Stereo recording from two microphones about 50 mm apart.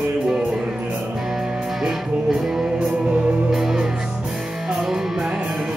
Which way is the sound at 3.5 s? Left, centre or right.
Centre.